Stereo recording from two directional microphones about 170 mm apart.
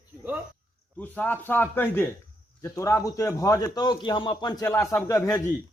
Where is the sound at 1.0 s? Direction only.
10° left (ahead or behind).